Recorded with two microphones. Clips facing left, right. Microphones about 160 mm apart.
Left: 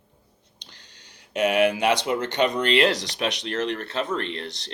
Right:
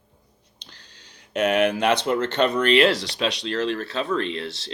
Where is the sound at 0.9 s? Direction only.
60° left (ahead or behind).